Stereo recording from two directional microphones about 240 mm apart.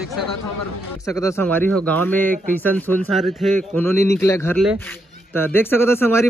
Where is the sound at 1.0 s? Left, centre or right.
Centre.